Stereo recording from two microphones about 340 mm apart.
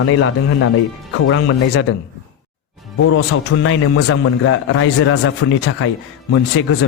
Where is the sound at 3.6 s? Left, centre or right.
Left.